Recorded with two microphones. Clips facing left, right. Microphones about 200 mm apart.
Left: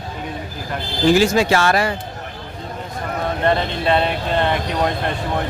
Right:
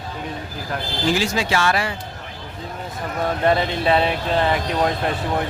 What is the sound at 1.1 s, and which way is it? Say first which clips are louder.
Speech: left 7 dB; 45° left (ahead or behind).